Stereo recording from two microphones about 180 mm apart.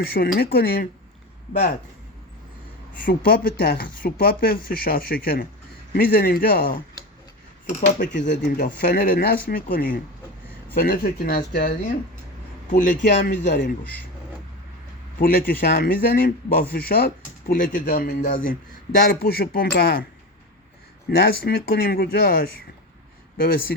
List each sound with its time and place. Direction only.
0.0 s speech: 60° left (ahead or behind)
2.9 s speech: 50° left (ahead or behind)
8.2 s speech: 75° left (ahead or behind)
8.8 s speech: 50° left (ahead or behind)
13.1 s speech: 70° left (ahead or behind)
15.2 s speech: 55° left (ahead or behind)
21.2 s speech: 60° left (ahead or behind)